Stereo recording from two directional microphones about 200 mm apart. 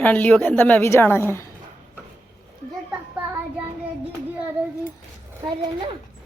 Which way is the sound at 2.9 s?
10° right (ahead or behind).